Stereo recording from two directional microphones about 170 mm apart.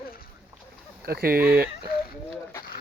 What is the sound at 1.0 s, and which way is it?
Speech, 65° right (ahead or behind).